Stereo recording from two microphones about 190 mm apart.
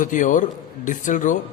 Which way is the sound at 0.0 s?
40° left (ahead or behind).